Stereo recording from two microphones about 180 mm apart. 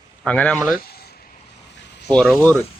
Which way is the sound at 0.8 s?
60° left (ahead or behind).